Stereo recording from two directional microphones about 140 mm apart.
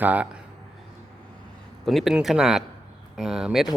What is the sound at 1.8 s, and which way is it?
Speech, centre (ahead or behind).